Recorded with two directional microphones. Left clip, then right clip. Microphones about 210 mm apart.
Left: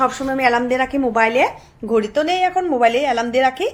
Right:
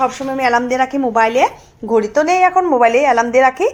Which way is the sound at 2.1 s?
10° left (ahead or behind).